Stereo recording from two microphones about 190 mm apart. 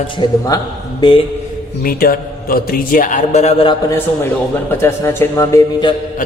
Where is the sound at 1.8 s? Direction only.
50° left (ahead or behind); by 3.7 s 30° left (ahead or behind).